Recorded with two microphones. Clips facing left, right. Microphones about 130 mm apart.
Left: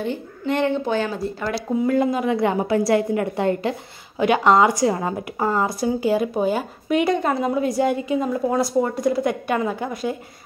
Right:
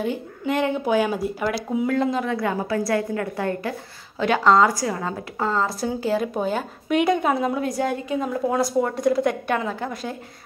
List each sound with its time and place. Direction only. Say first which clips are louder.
0.0 s speech: even; 5° right (ahead or behind)
1.9 s a woman's voice: left 4 dB; 10° left (ahead or behind)
2.3 s a woman's voice: left 4 dB; 20° left (ahead or behind)